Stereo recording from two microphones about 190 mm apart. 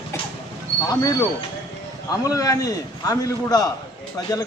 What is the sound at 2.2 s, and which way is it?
Speech, 20° left (ahead or behind).